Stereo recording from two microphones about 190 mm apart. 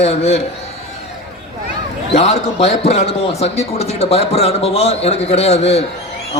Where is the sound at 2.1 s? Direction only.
35° left (ahead or behind).